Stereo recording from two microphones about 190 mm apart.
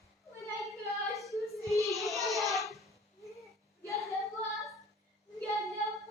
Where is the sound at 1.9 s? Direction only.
Centre (ahead or behind).